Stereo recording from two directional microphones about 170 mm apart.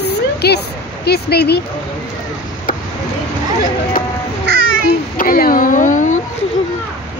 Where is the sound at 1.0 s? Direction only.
70° left (ahead or behind).